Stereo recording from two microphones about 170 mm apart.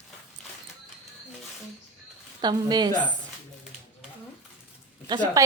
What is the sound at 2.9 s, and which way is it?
Speech, 25° left (ahead or behind).